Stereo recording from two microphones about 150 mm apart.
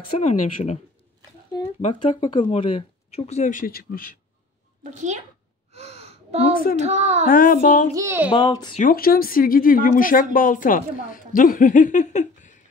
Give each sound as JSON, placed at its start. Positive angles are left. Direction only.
{"t": 0.2, "sound": "speech", "side_deg": 50}
{"t": 2.0, "sound": "speech", "side_deg": 40}
{"t": 4.9, "sound": "a child's voice", "side_deg": -50}
{"t": 5.7, "sound": "gasp", "side_deg": -45}
{"t": 6.8, "sound": "a child's voice", "side_deg": -50}
{"t": 7.2, "sound": "speech", "side_deg": 65}
{"t": 7.9, "sound": "a child's voice", "side_deg": -20}
{"t": 8.3, "sound": "speech", "side_deg": 30}
{"t": 8.8, "sound": "speech", "side_deg": 80}